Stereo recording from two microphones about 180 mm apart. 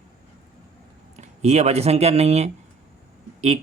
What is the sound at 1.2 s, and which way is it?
Speech, 40° right (ahead or behind).